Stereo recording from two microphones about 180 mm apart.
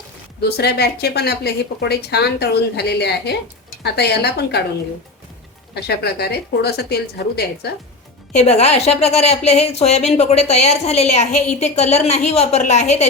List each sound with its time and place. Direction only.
0.4 s a woman's voice: 65° left (ahead or behind)
5.7 s a woman's voice: 65° left (ahead or behind)
8.4 s speech: 35° left (ahead or behind)